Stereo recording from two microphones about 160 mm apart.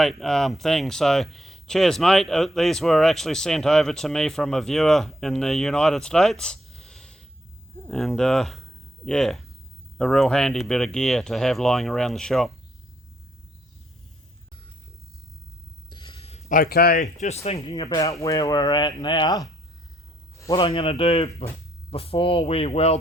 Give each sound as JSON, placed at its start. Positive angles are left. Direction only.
{"t": 0.0, "sound": "speech", "side_deg": 0}
{"t": 15.9, "sound": "a sound", "side_deg": 30}
{"t": 16.5, "sound": "speech", "side_deg": 65}
{"t": 17.2, "sound": "speech", "side_deg": 45}
{"t": 20.3, "sound": "a sound", "side_deg": 20}
{"t": 20.7, "sound": "speech", "side_deg": 35}